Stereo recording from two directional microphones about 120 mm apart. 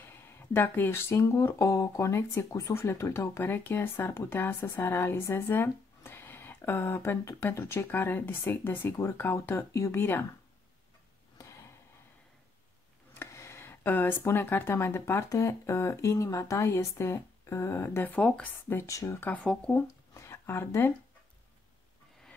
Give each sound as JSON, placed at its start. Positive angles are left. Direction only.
{"t": 0.0, "sound": "speech", "side_deg": 20}
{"t": 11.3, "sound": "a sound", "side_deg": 25}
{"t": 13.1, "sound": "speech", "side_deg": 20}
{"t": 18.8, "sound": "speech", "side_deg": 25}